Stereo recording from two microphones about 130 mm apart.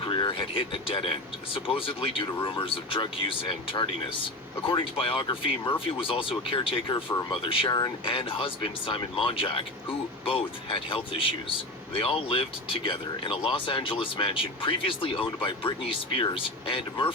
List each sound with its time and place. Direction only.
0.0 s speech: 40° left (ahead or behind)